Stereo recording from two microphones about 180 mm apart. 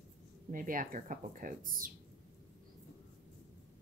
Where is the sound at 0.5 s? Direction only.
50° right (ahead or behind).